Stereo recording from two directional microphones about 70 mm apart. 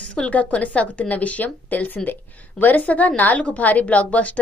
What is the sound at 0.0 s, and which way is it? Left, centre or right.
Speech, centre.